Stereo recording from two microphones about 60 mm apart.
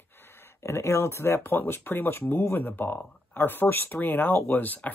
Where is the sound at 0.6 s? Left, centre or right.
Left.